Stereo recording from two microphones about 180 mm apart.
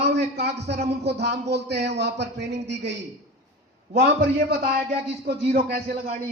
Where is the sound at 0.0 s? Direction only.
70° right (ahead or behind).